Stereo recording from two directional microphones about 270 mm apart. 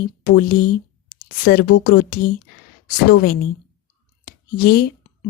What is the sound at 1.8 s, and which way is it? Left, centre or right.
Speech, left.